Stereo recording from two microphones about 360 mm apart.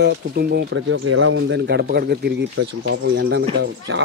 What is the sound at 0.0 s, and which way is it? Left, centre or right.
Speech, right.